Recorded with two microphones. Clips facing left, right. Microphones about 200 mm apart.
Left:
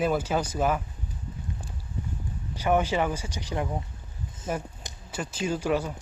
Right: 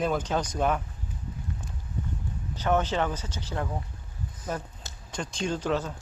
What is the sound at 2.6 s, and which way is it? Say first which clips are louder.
Speech: left 2 dB; 10° left (ahead or behind).